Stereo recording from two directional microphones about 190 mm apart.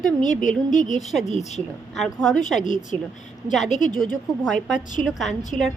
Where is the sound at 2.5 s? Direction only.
40° left (ahead or behind).